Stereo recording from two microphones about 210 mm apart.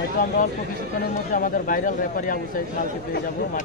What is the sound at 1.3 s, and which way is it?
Speech, 40° left (ahead or behind).